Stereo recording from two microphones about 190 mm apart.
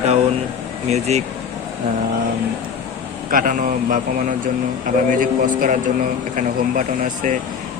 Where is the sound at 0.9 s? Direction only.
35° right (ahead or behind).